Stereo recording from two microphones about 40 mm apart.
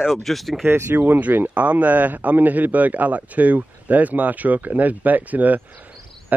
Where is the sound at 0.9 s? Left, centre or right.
Right.